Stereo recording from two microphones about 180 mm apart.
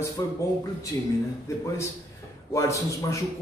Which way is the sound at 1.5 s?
15° left (ahead or behind).